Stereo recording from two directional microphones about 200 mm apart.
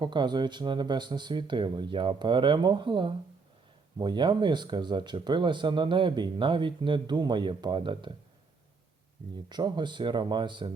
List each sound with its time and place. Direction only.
0.0 s speech: 20° right (ahead or behind)
9.5 s speech: 20° right (ahead or behind)